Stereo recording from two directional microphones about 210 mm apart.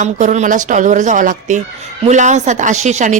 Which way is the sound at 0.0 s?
35° right (ahead or behind).